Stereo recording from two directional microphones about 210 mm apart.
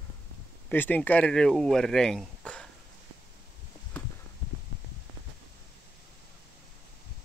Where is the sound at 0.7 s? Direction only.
10° left (ahead or behind).